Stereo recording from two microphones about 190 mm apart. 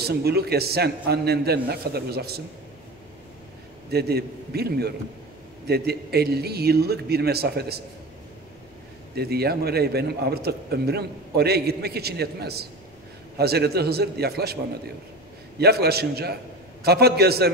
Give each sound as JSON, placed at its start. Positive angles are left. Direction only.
{"t": 0.0, "sound": "a man's voice", "side_deg": -55}
{"t": 3.9, "sound": "a man's voice", "side_deg": -55}
{"t": 9.1, "sound": "a man's voice", "side_deg": -55}
{"t": 15.6, "sound": "a man's voice", "side_deg": -55}